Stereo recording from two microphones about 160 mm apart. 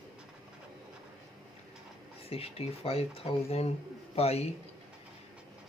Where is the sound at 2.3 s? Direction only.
40° left (ahead or behind).